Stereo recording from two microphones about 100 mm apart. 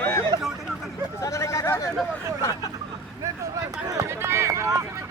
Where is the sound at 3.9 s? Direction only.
30° right (ahead or behind).